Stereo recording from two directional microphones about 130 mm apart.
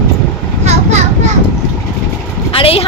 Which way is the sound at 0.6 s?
60° right (ahead or behind).